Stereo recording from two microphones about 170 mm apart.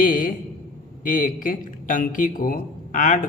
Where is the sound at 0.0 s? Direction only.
55° left (ahead or behind).